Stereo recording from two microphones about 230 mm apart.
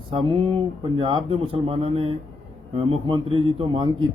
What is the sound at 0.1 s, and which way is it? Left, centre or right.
A man's voice, right.